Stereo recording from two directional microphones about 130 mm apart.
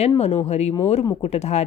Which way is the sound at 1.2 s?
55° left (ahead or behind).